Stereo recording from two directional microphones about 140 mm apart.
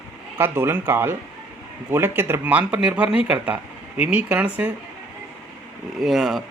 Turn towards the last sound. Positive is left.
turn(degrees=0)  # may be behind; listen again after turning